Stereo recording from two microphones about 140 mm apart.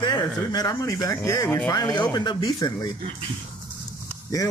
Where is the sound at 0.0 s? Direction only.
30° left (ahead or behind).